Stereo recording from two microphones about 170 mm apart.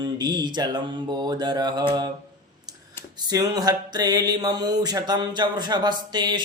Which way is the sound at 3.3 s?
20° right (ahead or behind).